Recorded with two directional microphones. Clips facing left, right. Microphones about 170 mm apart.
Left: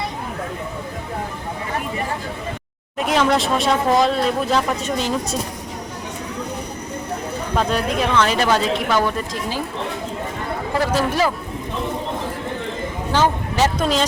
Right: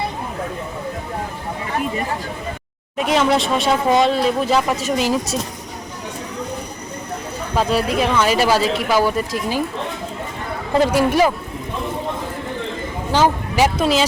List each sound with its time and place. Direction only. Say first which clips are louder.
3.0 s speech: right 1 dB; centre (ahead or behind)
7.5 s speech: right 2 dB; 5° right (ahead or behind)
10.8 s speech: right 5 dB; 15° right (ahead or behind)
13.1 s speech: right 2 dB; 10° right (ahead or behind)